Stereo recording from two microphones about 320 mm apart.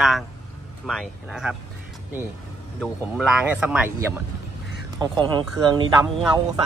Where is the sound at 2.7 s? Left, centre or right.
Centre.